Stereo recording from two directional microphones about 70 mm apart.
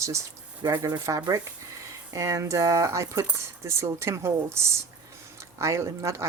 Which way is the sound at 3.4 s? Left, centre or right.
Right.